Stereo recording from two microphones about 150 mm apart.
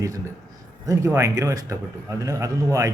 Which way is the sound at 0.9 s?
20° right (ahead or behind).